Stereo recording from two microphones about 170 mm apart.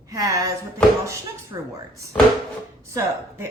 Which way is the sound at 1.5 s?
20° right (ahead or behind).